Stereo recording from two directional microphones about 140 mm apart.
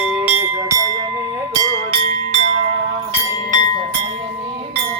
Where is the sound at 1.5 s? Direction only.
35° right (ahead or behind).